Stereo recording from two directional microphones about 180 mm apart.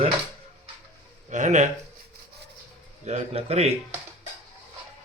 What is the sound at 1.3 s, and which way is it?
Speech, 45° right (ahead or behind).